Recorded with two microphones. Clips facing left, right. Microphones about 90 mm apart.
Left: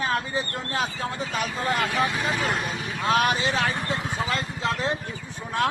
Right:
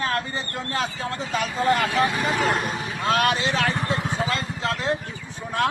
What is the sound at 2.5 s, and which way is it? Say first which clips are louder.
Speech: right 3 dB; 50° right (ahead or behind).